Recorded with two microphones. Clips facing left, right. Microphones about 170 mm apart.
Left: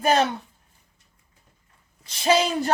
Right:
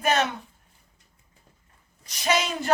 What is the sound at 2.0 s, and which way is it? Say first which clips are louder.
Speech: left 5 dB; 30° left (ahead or behind).